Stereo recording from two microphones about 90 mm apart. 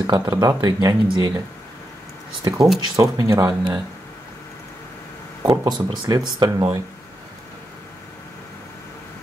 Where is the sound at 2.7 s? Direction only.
40° right (ahead or behind).